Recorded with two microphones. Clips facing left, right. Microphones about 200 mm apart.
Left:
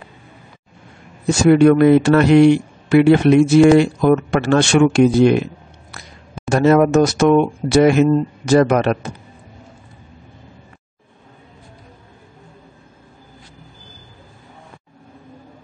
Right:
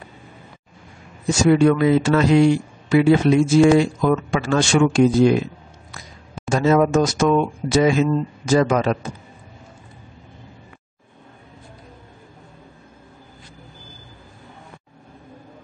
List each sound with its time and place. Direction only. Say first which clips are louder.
1.2 s a man's voice: left 4 dB; 65° left (ahead or behind)